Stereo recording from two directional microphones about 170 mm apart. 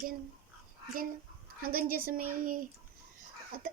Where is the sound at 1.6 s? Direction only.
60° right (ahead or behind).